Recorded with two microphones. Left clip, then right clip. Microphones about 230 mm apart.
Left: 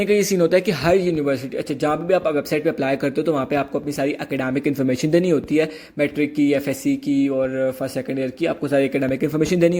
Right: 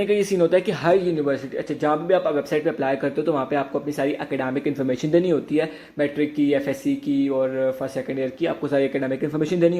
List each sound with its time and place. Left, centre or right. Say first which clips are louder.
0.0 s speech: left 2 dB; left